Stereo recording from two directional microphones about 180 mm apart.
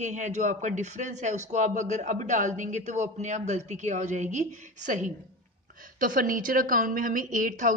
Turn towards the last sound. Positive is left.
turn(degrees=-45)  # may be behind; listen again after turning